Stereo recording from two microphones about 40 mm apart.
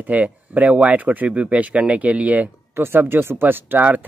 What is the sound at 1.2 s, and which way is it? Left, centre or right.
Speech, right.